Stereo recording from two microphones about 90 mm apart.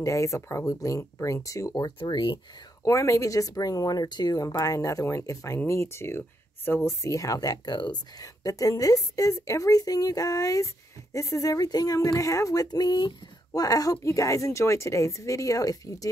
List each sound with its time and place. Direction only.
0.0 s speech: 35° left (ahead or behind); by 2.4 s 55° left (ahead or behind)
2.8 s speech: 35° left (ahead or behind)